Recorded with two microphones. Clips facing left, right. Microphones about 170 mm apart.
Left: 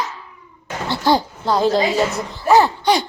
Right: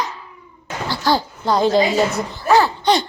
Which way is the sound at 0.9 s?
20° left (ahead or behind).